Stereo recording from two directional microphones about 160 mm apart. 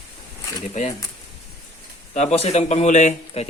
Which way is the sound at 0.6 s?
45° left (ahead or behind).